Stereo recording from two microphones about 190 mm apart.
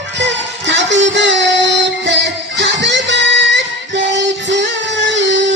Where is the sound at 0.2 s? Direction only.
70° right (ahead or behind).